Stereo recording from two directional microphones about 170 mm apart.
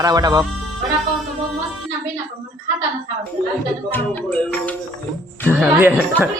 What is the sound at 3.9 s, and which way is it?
Music, 10° left (ahead or behind).